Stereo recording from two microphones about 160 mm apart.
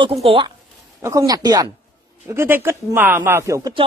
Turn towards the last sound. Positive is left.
turn(degrees=-20)  # may be behind; listen again after turning